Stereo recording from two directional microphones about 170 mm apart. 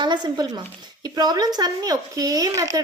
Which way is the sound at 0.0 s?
25° right (ahead or behind).